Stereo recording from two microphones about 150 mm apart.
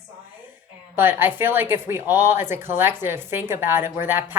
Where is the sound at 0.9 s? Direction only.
15° right (ahead or behind).